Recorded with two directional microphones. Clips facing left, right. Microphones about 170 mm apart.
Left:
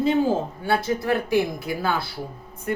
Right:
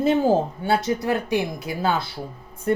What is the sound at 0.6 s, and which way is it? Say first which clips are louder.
Speech: right 1 dB; 20° right (ahead or behind).